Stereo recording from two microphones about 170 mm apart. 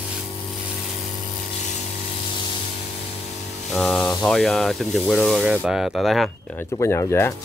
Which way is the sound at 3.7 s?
5° left (ahead or behind).